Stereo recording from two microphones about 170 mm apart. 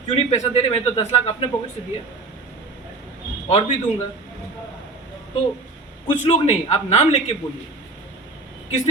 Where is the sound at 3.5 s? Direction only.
35° left (ahead or behind).